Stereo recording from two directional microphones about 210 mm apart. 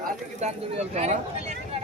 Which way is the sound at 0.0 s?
35° right (ahead or behind).